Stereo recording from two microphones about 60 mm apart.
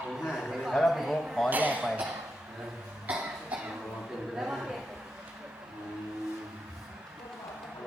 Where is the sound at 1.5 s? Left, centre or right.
Right.